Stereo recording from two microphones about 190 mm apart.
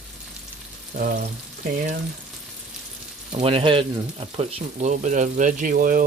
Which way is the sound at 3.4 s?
30° right (ahead or behind).